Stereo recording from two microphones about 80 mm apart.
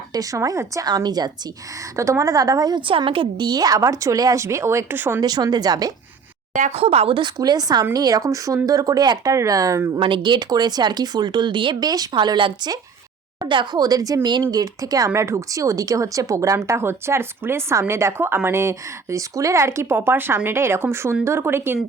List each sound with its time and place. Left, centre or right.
0.1 s a woman's voice: right
0.9 s speech: right
2.0 s a woman's voice: right
5.2 s speech: right
7.3 s a woman's voice: right
10.0 s speech: right
12.1 s speech: right
13.5 s speech: right
13.8 s a woman's voice: right
14.2 s speech: right
14.6 s a woman's voice: right